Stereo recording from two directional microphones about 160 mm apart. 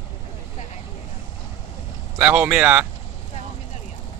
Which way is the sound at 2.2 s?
10° right (ahead or behind).